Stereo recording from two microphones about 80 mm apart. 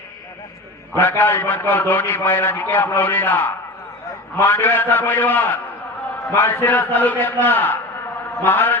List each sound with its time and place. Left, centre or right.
0.9 s a man's voice: left